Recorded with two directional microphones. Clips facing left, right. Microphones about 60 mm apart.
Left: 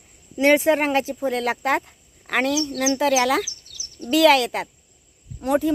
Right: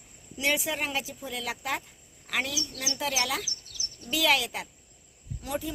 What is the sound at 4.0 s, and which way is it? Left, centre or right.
Speech, left.